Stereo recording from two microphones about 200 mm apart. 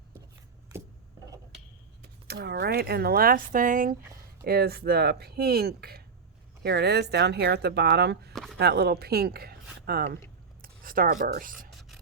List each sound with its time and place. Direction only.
1.5 s speech: 55° right (ahead or behind)
8.3 s a sound: centre (ahead or behind)
8.5 s speech: 55° right (ahead or behind)
10.6 s scissors: 45° right (ahead or behind)